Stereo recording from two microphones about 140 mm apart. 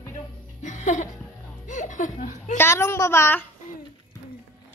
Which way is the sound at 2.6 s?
20° left (ahead or behind).